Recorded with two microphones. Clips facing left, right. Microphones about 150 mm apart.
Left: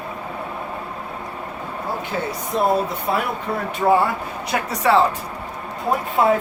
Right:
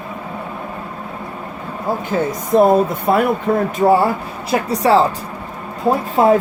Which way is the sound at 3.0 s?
55° right (ahead or behind).